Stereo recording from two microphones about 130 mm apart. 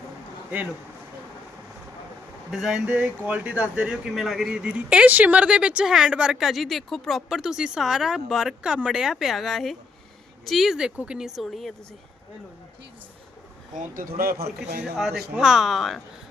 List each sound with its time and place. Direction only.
2.5 s speech: centre (ahead or behind)
11.3 s speech: centre (ahead or behind)
13.7 s speech: 90° right
14.8 s speech: 5° right (ahead or behind)